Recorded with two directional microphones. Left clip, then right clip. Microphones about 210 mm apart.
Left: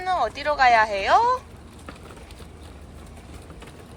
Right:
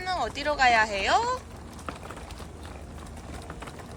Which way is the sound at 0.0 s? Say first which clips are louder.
Left 5 dB; 5° right (ahead or behind).